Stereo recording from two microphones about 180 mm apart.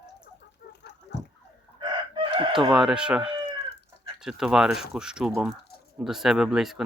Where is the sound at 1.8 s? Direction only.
25° right (ahead or behind).